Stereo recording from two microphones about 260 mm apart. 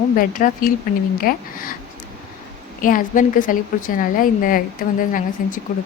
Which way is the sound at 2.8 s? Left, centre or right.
Left.